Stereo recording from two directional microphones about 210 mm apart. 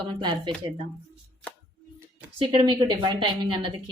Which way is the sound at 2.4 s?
25° right (ahead or behind).